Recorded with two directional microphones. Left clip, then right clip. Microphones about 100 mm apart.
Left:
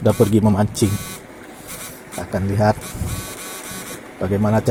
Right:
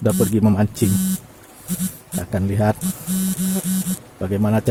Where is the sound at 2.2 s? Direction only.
90° right.